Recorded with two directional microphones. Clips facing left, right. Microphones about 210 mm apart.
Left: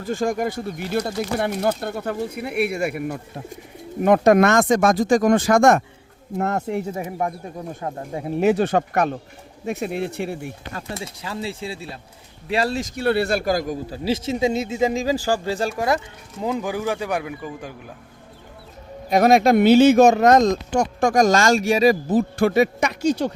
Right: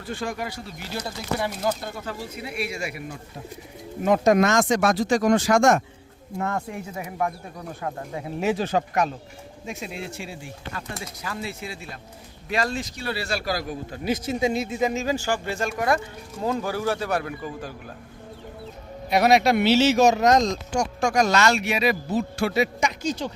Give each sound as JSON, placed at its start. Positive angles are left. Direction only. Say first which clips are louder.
{"t": 0.0, "sound": "speech", "louder": "left 8 dB", "side_deg": 45}
{"t": 6.3, "sound": "speech", "louder": "left 4 dB", "side_deg": 40}
{"t": 6.9, "sound": "speech", "louder": "left 2 dB", "side_deg": 25}
{"t": 8.4, "sound": "speech", "louder": "left 6 dB", "side_deg": 60}
{"t": 10.9, "sound": "speech", "louder": "left 3 dB", "side_deg": 25}
{"t": 13.0, "sound": "speech", "louder": "left 13 dB", "side_deg": 60}
{"t": 13.9, "sound": "speech", "louder": "left 2 dB", "side_deg": 30}
{"t": 16.4, "sound": "speech", "louder": "left 2 dB", "side_deg": 15}
{"t": 19.1, "sound": "speech", "louder": "left 4 dB", "side_deg": 45}